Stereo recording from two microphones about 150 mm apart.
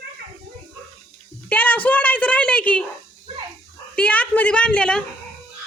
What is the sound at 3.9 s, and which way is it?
A woman's voice, 10° left (ahead or behind).